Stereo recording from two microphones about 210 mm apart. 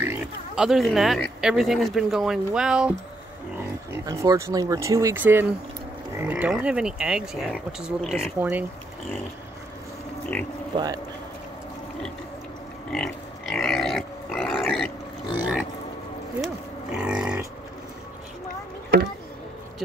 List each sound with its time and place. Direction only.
0.0 s speech: 5° right (ahead or behind)
3.9 s speech: 15° right (ahead or behind)
12.9 s pig: centre (ahead or behind)
16.9 s livestock: 5° right (ahead or behind)